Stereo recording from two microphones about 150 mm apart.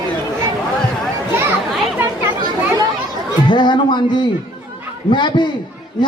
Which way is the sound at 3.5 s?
30° left (ahead or behind).